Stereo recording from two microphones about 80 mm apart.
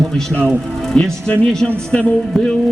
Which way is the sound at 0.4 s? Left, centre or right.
Centre.